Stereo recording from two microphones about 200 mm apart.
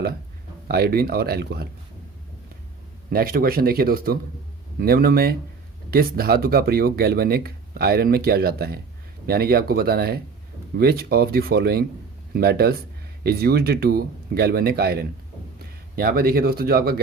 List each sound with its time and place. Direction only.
0.7 s speech: 50° right (ahead or behind)
3.1 s speech: 45° right (ahead or behind)